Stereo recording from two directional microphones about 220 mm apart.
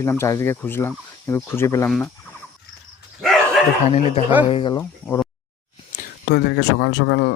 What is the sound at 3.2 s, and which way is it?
Dog, centre (ahead or behind).